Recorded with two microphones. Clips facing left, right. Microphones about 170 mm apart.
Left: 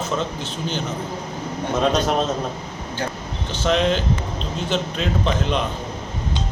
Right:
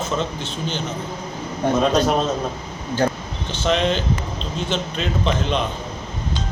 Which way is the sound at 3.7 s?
5° left (ahead or behind).